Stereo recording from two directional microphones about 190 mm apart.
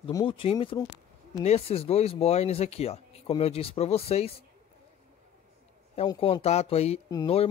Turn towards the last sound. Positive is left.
turn(degrees=30)  # may be behind; listen again after turning